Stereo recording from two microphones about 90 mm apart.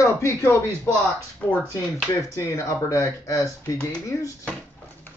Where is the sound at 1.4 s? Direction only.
15° left (ahead or behind).